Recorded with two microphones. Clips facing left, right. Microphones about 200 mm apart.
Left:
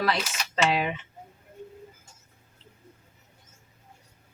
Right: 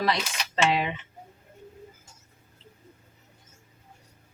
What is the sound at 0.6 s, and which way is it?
Speech, centre (ahead or behind).